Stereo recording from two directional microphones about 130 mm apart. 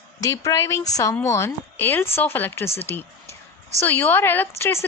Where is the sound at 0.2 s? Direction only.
25° left (ahead or behind).